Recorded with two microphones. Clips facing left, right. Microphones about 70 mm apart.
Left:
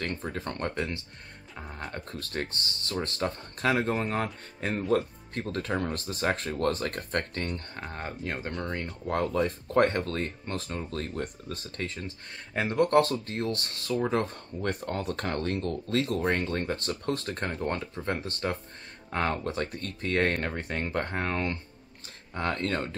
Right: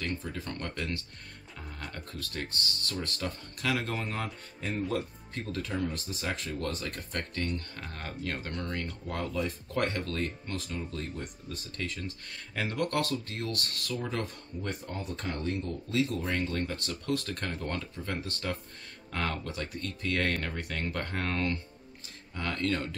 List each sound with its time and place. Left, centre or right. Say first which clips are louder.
0.0 s speech: left 3 dB; left
2.0 s speech: left 4 dB; left
9.0 s speech: left 8 dB; left
14.6 s speech: left 6 dB; left
22.3 s speech: left 2 dB; left